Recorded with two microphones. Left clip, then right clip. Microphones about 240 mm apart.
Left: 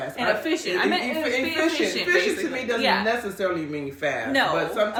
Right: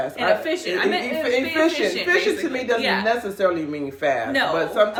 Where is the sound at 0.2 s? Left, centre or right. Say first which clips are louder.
Right 2 dB; centre.